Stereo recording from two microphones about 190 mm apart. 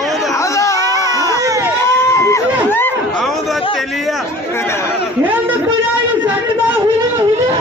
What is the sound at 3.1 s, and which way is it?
Chatter, centre (ahead or behind).